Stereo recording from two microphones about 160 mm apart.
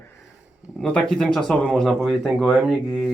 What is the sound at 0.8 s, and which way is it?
Speech, 5° left (ahead or behind).